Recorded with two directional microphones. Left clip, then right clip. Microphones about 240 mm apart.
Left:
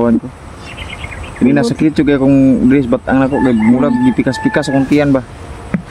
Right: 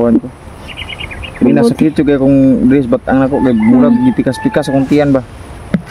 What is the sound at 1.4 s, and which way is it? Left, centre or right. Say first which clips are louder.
Speech: right 2 dB; centre.